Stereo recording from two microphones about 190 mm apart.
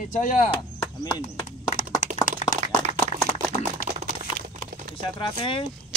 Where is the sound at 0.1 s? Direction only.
45° left (ahead or behind).